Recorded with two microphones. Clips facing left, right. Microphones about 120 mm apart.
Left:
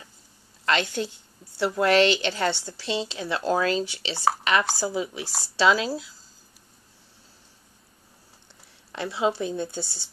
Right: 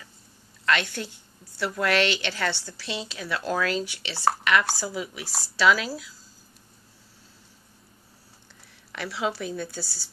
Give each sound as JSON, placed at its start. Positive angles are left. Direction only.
{"t": 0.7, "sound": "a woman's voice", "side_deg": 25}
{"t": 8.9, "sound": "a woman's voice", "side_deg": 25}